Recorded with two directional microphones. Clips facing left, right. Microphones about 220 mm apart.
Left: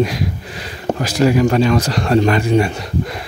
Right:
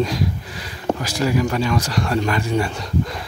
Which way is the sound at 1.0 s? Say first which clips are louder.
Left 8 dB; 75° left (ahead or behind).